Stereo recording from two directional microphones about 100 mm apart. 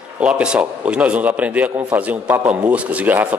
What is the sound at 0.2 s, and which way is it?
A man's voice, 10° right (ahead or behind).